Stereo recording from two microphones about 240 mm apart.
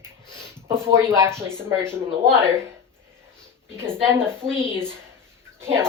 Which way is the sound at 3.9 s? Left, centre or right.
Centre.